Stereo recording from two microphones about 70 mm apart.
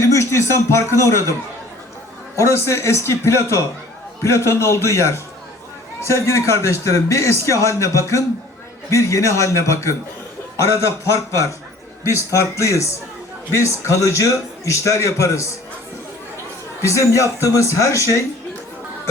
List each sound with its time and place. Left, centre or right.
0.0 s a man's voice: left
16.8 s a man's voice: left